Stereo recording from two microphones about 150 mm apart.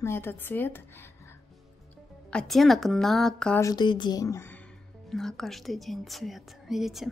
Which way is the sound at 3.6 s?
30° left (ahead or behind).